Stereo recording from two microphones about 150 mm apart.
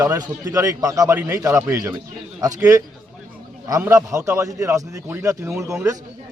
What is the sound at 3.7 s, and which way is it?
Speech, 20° right (ahead or behind).